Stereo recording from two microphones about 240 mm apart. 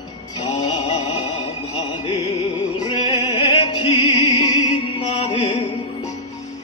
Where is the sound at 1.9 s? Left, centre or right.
Left.